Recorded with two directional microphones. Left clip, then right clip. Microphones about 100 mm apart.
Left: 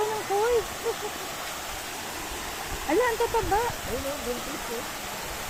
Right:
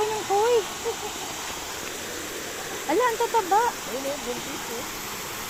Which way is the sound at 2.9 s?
30° left (ahead or behind).